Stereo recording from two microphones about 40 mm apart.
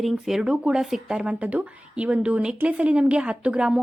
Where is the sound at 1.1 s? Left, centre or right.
Right.